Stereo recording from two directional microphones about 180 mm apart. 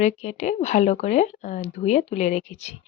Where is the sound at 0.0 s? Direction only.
40° left (ahead or behind).